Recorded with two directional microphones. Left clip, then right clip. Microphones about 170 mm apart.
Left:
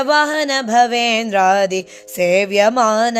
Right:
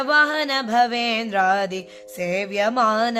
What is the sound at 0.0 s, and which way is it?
Speech, 30° left (ahead or behind).